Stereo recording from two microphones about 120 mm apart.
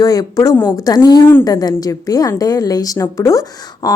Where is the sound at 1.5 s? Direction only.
30° left (ahead or behind).